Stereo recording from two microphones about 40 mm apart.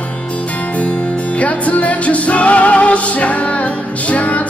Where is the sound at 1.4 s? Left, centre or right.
Left.